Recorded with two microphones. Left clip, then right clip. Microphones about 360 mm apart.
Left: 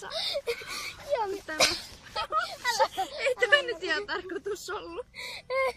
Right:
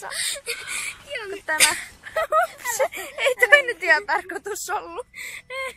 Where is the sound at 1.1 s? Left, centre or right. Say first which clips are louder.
Left 6 dB; left.